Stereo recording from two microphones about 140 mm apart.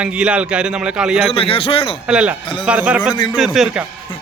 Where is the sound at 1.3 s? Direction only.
40° left (ahead or behind).